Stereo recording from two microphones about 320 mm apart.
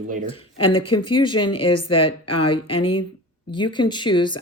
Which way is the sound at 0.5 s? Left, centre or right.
Left.